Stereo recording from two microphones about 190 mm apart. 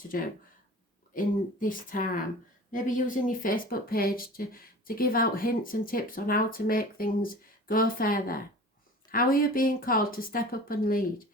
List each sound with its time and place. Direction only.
0.1 s speech: 50° left (ahead or behind)